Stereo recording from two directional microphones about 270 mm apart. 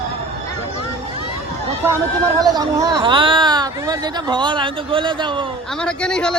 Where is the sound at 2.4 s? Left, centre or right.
Centre.